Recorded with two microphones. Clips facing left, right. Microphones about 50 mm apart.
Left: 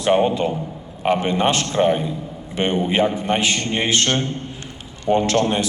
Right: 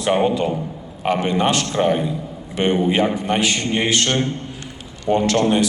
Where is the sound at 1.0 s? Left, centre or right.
Left.